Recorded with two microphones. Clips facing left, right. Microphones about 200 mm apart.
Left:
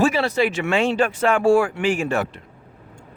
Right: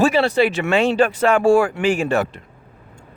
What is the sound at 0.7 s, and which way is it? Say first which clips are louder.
Speech: right 3 dB; 65° right (ahead or behind).